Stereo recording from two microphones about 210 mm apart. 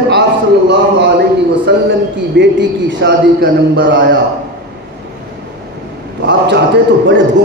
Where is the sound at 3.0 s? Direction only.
45° right (ahead or behind).